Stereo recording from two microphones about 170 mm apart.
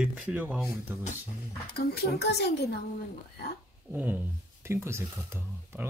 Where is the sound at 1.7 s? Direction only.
65° left (ahead or behind).